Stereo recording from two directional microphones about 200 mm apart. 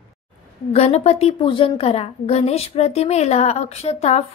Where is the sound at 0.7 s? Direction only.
30° left (ahead or behind).